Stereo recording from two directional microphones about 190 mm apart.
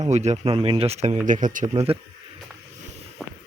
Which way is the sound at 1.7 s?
30° right (ahead or behind).